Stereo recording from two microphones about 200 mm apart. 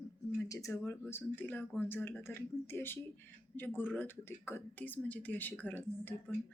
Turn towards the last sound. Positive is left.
turn(degrees=10)  # may be behind; listen again after turning